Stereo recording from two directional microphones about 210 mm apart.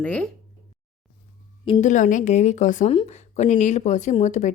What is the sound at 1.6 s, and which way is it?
Speech, 30° left (ahead or behind).